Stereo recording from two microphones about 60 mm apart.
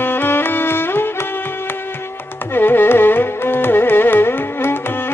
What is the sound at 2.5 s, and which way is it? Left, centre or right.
Carnatic music, left.